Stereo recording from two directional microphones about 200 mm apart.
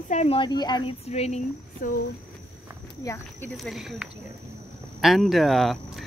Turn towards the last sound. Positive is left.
turn(degrees=0)  # may be behind; listen again after turning